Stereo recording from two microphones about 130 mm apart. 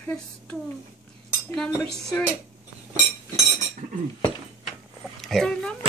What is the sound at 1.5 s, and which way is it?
Dishes, 5° left (ahead or behind).